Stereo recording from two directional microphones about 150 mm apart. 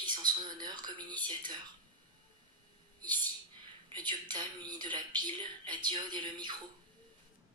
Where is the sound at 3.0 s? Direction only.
30° right (ahead or behind).